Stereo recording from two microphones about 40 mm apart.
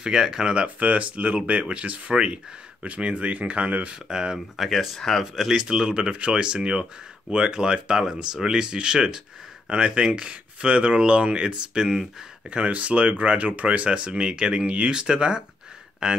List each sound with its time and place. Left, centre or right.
0.0 s speech: centre
0.6 s speech: right
3.9 s speech: centre
4.6 s speech: centre
5.2 s speech: centre
6.1 s speech: right
13.9 s speech: right